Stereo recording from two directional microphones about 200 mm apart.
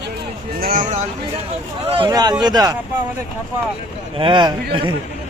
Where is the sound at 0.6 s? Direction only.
45° right (ahead or behind).